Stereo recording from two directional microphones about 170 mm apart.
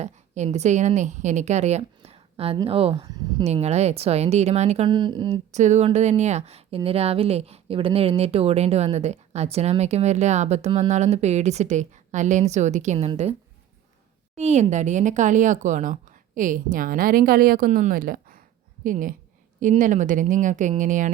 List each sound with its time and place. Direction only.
0.0 s a woman's voice: 40° right (ahead or behind)
4.9 s speech: 25° right (ahead or behind)
5.5 s speech: 45° right (ahead or behind)
14.3 s a woman's voice: 40° right (ahead or behind)